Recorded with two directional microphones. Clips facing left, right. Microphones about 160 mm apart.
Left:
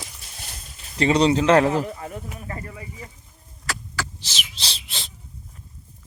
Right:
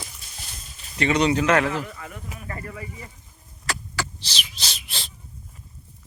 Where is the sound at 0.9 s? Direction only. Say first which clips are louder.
Left 3 dB; 30° left (ahead or behind).